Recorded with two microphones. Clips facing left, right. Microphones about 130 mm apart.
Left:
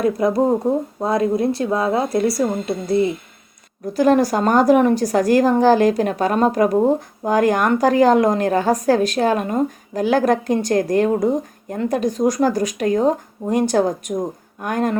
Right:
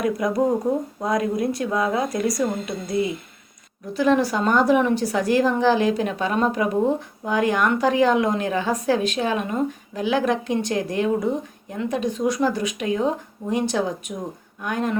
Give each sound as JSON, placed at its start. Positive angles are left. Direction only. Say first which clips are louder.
{"t": 0.0, "sound": "speech", "louder": "left 4 dB", "side_deg": 30}